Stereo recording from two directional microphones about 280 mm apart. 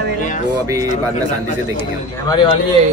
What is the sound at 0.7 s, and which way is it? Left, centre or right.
Speech, centre.